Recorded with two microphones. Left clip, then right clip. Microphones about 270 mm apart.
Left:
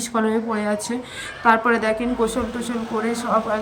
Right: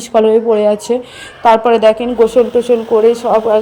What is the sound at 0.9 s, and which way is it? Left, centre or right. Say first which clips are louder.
Speech: right 14 dB; right.